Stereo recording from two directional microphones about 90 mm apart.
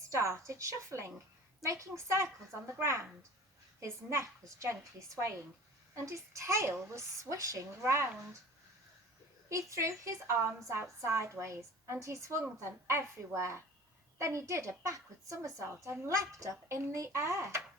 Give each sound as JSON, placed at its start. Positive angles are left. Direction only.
{"t": 0.1, "sound": "a woman's voice", "side_deg": -30}
{"t": 9.5, "sound": "a woman's voice", "side_deg": -35}